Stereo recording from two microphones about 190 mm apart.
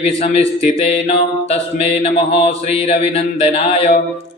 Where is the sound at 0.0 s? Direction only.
35° left (ahead or behind).